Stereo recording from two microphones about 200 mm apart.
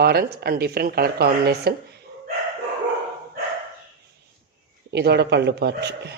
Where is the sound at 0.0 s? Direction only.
50° right (ahead or behind).